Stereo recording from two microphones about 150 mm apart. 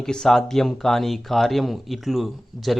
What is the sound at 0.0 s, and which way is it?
Speech, 5° left (ahead or behind).